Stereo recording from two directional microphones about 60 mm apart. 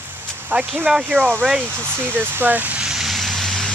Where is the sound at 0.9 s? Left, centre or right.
Centre.